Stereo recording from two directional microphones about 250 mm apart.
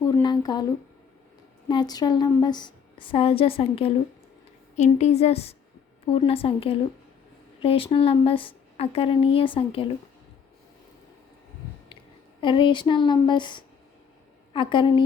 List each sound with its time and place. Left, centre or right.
0.0 s a sound: centre
1.6 s a woman's voice: centre
12.4 s a woman's voice: centre